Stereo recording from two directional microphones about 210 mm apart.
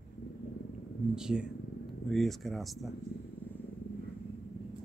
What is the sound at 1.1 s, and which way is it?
Speech, 5° right (ahead or behind).